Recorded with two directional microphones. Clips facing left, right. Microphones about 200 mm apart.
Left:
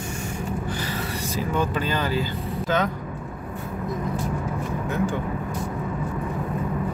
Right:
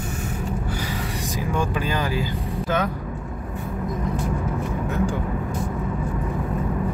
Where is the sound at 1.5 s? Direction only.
10° right (ahead or behind).